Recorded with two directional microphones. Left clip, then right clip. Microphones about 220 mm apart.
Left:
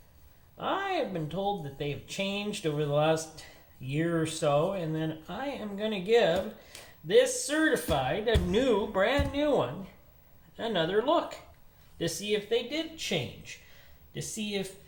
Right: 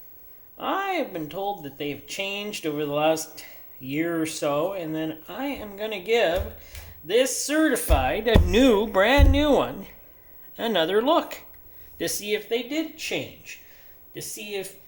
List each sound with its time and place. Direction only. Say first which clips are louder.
0.5 s speech: right 4 dB; 35° right (ahead or behind)